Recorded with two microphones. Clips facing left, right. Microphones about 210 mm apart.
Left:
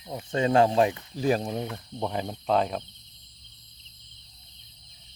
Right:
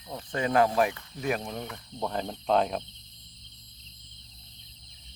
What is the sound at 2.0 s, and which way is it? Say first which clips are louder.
Speech: left 1 dB; 10° left (ahead or behind).